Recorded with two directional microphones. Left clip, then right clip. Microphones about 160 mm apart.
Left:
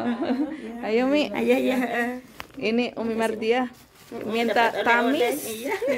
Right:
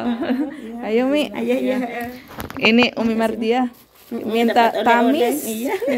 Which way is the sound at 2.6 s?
10° right (ahead or behind).